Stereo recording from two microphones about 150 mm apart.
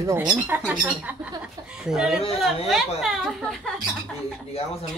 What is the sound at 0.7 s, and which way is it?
A woman's voice, 10° right (ahead or behind).